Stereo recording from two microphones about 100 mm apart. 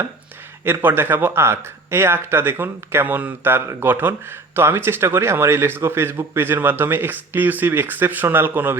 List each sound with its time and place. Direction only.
0.6 s speech: 20° right (ahead or behind)